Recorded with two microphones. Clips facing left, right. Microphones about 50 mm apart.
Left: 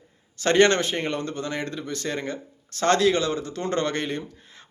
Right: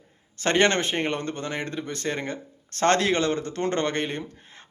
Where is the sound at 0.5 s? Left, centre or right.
Right.